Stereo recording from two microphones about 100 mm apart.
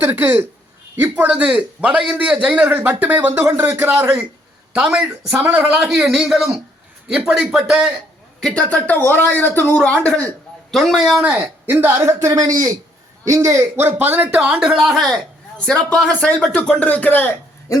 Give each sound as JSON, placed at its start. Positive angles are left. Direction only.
{"t": 0.0, "sound": "a man's voice", "side_deg": -20}
{"t": 4.7, "sound": "a man's voice", "side_deg": -10}
{"t": 8.4, "sound": "speech", "side_deg": 10}
{"t": 10.7, "sound": "a man's voice", "side_deg": 0}
{"t": 12.3, "sound": "a man's voice", "side_deg": -40}